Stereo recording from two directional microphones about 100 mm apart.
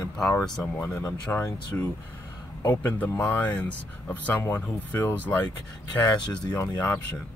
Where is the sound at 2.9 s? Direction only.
15° left (ahead or behind).